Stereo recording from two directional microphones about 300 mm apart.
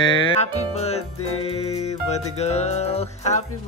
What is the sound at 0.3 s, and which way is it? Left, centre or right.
Music, left.